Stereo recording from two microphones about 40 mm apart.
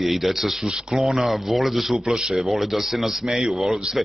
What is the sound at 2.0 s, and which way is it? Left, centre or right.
Speech, centre.